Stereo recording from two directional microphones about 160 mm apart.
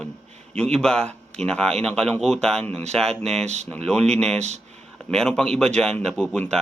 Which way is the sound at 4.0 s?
45° right (ahead or behind).